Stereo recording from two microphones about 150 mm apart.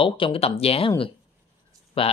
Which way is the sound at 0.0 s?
40° left (ahead or behind).